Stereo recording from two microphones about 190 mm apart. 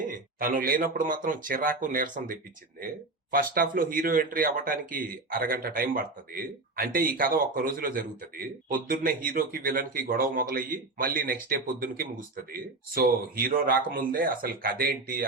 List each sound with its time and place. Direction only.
0.0 s speech: 45° right (ahead or behind)